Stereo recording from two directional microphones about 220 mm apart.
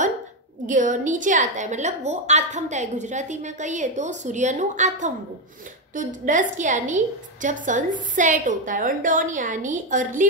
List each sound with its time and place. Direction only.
0.7 s a woman's voice: 35° right (ahead or behind)